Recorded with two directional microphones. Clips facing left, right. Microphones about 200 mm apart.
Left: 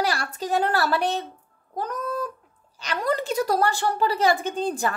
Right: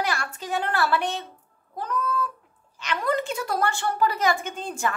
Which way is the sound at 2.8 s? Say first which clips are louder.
Even; 35° left (ahead or behind).